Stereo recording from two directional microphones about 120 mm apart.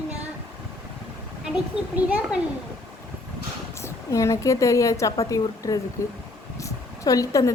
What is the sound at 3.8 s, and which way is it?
A woman's voice, 25° left (ahead or behind).